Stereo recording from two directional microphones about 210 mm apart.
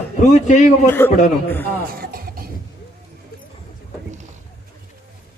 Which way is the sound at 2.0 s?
45° right (ahead or behind).